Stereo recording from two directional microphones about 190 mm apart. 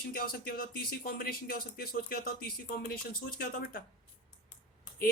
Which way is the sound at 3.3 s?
50° left (ahead or behind).